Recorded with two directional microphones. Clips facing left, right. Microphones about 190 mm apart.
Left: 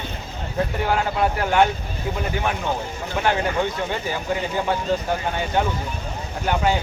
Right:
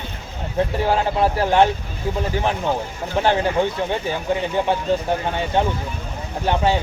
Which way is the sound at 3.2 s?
30° right (ahead or behind).